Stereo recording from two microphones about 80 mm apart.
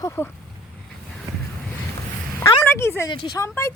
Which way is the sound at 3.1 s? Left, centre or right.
Left.